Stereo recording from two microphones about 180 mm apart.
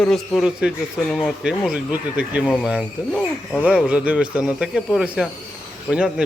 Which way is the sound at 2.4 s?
5° left (ahead or behind).